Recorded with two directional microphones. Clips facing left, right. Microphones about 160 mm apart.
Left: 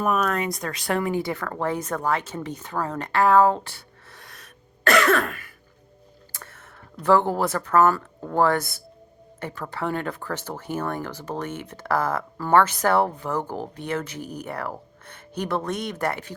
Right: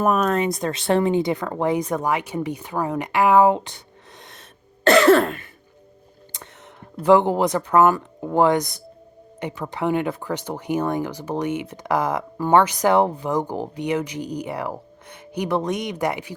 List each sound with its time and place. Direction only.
0.0 s speech: 40° right (ahead or behind)
0.3 s speech: 25° right (ahead or behind)
4.2 s throat clearing: 25° right (ahead or behind)
6.3 s a sound: 20° right (ahead or behind)
7.0 s speech: 15° right (ahead or behind)